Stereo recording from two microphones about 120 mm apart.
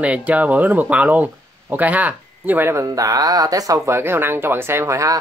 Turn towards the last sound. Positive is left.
turn(degrees=-25)  # may be behind; listen again after turning